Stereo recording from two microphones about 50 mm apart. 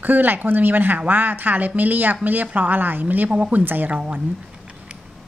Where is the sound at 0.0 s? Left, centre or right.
Right.